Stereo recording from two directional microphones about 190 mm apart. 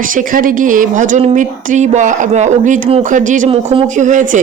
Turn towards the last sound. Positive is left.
turn(degrees=-40)  # may be behind; listen again after turning